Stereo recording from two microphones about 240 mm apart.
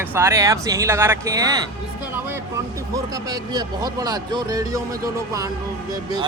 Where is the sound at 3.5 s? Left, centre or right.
Centre.